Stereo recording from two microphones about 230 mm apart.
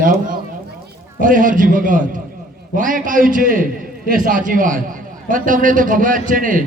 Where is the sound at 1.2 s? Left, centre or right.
Right.